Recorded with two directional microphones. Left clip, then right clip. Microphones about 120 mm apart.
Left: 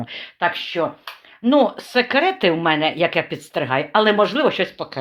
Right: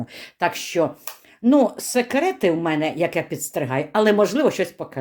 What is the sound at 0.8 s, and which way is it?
Speech, 60° right (ahead or behind).